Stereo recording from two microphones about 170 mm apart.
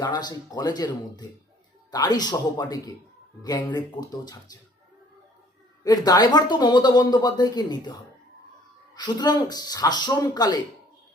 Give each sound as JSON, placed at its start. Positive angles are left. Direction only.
{"t": 0.0, "sound": "speech", "side_deg": 25}
{"t": 5.8, "sound": "speech", "side_deg": 25}
{"t": 9.0, "sound": "speech", "side_deg": 25}